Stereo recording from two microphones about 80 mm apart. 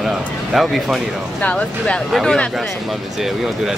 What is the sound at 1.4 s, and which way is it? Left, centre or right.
Speech, centre.